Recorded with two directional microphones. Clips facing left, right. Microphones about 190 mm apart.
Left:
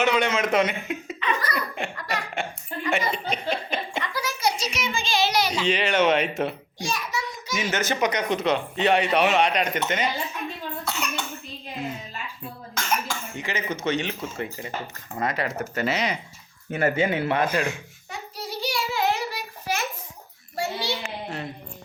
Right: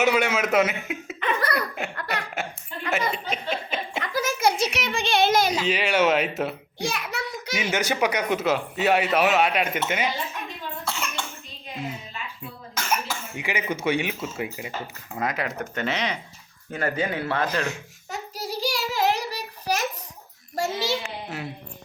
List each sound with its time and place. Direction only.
0.0 s speech: 5° right (ahead or behind)
1.2 s laughter: 55° right (ahead or behind)
2.4 s giggle: 5° right (ahead or behind)
2.9 s a sound: 5° right (ahead or behind)
3.5 s laughter: centre (ahead or behind)
4.1 s a sound: 50° right (ahead or behind)
5.6 s speech: 5° right (ahead or behind)
6.7 s a sound: 60° right (ahead or behind)
7.5 s speech: 10° right (ahead or behind)
10.8 s cough: centre (ahead or behind)
12.7 s speech: 5° right (ahead or behind)
16.7 s speech: 20° left (ahead or behind)
18.1 s child singing: 40° right (ahead or behind)
20.6 s a sound: 40° right (ahead or behind)